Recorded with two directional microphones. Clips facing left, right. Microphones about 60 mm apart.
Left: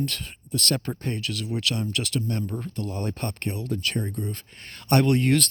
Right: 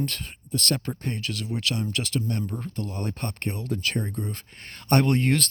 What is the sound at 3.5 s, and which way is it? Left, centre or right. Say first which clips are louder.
Speech: right 1 dB; right.